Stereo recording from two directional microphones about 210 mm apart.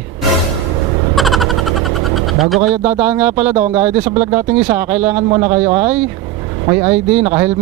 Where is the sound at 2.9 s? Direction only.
10° right (ahead or behind).